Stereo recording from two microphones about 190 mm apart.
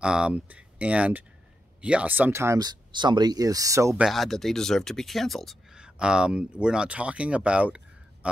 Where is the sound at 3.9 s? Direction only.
Centre (ahead or behind).